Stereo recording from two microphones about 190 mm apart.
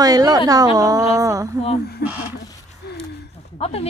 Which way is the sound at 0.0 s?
20° right (ahead or behind).